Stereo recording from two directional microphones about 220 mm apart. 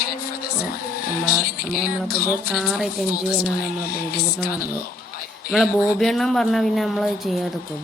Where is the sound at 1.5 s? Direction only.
40° left (ahead or behind).